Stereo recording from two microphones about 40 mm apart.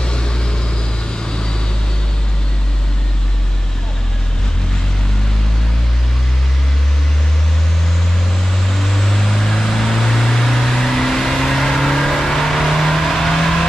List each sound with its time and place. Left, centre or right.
0.0 s vehicle: left
8.7 s vehicle: centre